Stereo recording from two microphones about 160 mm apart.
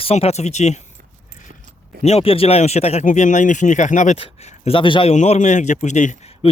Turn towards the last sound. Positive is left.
turn(degrees=45)  # may be behind; listen again after turning